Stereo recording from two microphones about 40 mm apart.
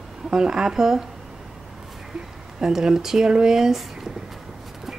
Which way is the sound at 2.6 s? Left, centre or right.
Centre.